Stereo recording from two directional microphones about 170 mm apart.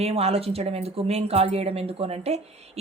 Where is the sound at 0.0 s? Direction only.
35° right (ahead or behind).